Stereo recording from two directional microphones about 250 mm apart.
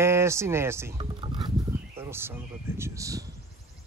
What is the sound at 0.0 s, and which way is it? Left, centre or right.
Speech, centre.